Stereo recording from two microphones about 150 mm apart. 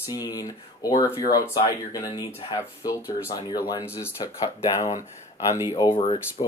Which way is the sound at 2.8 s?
25° left (ahead or behind).